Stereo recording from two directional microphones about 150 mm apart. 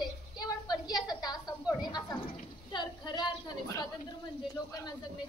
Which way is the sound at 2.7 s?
30° left (ahead or behind).